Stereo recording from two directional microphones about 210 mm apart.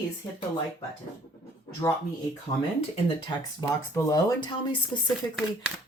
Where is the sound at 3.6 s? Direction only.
15° left (ahead or behind).